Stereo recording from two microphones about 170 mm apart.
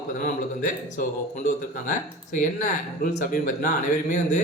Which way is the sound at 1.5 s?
50° left (ahead or behind).